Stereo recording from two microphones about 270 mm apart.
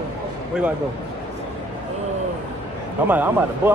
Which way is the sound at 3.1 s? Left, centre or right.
Centre.